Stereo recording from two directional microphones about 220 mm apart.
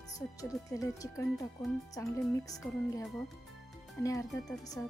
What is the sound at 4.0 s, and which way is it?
Speech, 15° left (ahead or behind).